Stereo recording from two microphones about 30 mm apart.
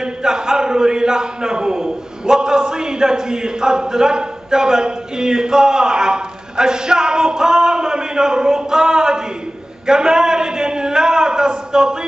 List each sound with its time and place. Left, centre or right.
0.0 s a man's voice: right